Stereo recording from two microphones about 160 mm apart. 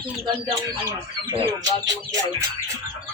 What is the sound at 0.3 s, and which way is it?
Speech, 30° right (ahead or behind).